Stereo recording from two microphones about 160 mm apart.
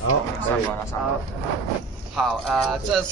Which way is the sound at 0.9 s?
20° left (ahead or behind).